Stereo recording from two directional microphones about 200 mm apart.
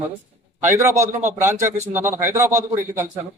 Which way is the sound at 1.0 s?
35° right (ahead or behind).